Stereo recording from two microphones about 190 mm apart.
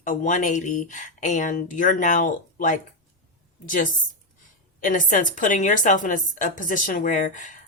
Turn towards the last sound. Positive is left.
turn(degrees=40)  # may be behind; listen again after turning